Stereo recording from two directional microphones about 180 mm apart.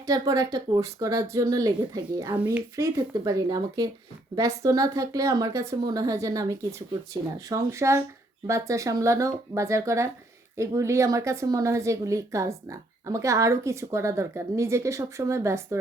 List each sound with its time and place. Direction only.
0.0 s a woman's voice: 20° right (ahead or behind)